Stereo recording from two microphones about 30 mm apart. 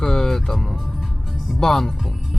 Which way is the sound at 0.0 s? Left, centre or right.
Centre.